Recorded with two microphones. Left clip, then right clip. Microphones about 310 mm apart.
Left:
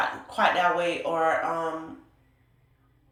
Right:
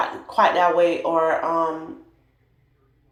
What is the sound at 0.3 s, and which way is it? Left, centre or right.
Speech, centre.